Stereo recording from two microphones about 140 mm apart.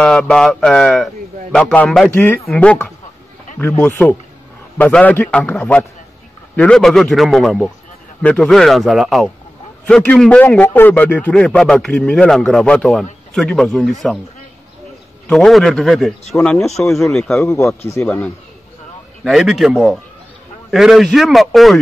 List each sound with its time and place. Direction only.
0.0 s a man's voice: 5° left (ahead or behind)
2.0 s a man's voice: 15° left (ahead or behind)
15.2 s a man's voice: centre (ahead or behind)
17.4 s speech: 20° left (ahead or behind)
18.0 s a man's voice: 5° left (ahead or behind)